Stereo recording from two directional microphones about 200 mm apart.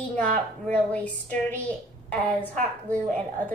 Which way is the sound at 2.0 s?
5° left (ahead or behind).